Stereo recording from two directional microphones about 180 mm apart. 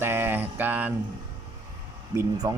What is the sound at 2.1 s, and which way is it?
Speech, 20° right (ahead or behind).